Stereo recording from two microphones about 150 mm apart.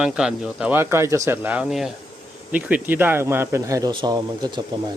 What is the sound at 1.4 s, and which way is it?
Speech, 5° right (ahead or behind).